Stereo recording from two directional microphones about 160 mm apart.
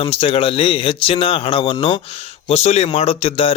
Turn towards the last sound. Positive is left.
turn(degrees=40)  # may be behind; listen again after turning